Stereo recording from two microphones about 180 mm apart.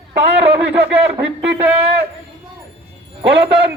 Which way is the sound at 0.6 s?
10° right (ahead or behind).